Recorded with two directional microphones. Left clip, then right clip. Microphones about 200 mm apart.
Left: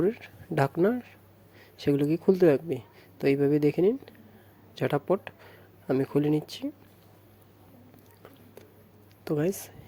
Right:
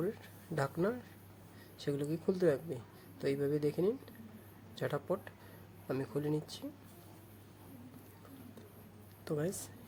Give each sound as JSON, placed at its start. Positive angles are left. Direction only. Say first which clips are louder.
{"t": 0.0, "sound": "speech", "louder": "left 11 dB", "side_deg": 40}
{"t": 9.2, "sound": "speech", "louder": "left 9 dB", "side_deg": 35}